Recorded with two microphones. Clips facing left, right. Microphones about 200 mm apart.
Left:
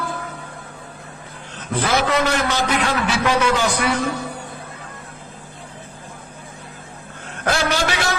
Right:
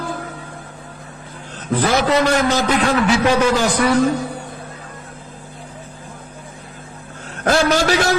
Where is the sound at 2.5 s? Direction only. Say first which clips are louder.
Right 4 dB; 35° right (ahead or behind).